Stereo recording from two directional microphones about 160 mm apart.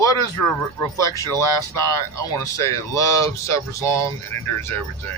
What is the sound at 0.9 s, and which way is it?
Speech, 20° left (ahead or behind).